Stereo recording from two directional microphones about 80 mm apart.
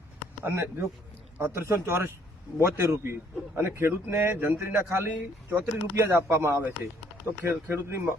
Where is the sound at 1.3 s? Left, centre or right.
Right.